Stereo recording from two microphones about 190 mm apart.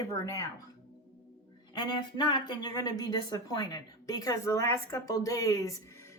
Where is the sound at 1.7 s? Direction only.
20° left (ahead or behind).